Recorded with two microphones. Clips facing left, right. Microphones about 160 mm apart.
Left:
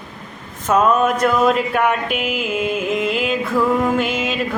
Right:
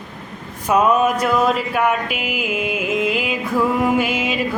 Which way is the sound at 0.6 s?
10° right (ahead or behind).